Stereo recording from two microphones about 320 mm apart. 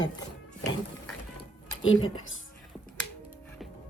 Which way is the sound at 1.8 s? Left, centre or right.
Left.